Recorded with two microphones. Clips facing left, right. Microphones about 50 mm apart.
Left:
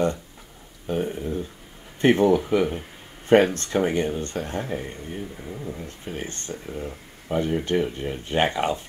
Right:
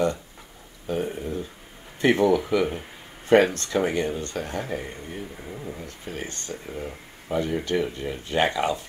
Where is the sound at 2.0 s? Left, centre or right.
Left.